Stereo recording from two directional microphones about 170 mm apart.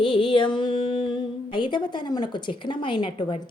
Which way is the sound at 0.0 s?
30° left (ahead or behind).